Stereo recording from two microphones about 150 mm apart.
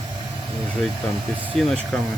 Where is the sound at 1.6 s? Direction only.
5° left (ahead or behind).